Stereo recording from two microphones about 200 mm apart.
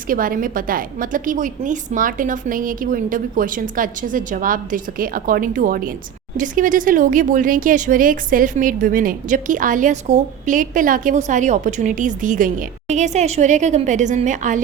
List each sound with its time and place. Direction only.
0.1 s a woman's voice: 45° right (ahead or behind)